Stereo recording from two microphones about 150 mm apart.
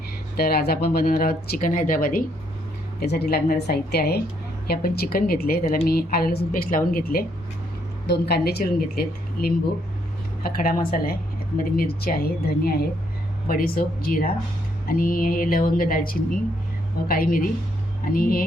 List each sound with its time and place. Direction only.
0.3 s a woman's voice: 90° left; by 2.2 s 70° left (ahead or behind)
3.0 s a woman's voice: 90° left
10.4 s speech: 75° left (ahead or behind); by 12.8 s 90° left
13.5 s speech: 75° left (ahead or behind)